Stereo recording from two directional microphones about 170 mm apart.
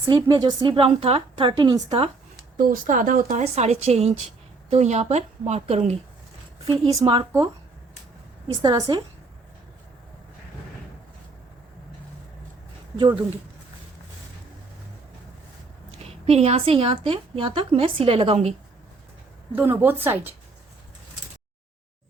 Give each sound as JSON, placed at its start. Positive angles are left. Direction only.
{"t": 0.1, "sound": "a woman's voice", "side_deg": -25}
{"t": 2.6, "sound": "speech", "side_deg": -55}
{"t": 3.4, "sound": "a woman's voice", "side_deg": -40}
{"t": 8.6, "sound": "a woman's voice", "side_deg": -25}
{"t": 13.0, "sound": "a woman's voice", "side_deg": -25}
{"t": 16.0, "sound": "a woman's voice", "side_deg": -35}
{"t": 19.5, "sound": "speech", "side_deg": -10}